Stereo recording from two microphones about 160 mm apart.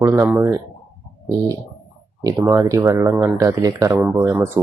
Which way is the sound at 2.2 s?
15° right (ahead or behind).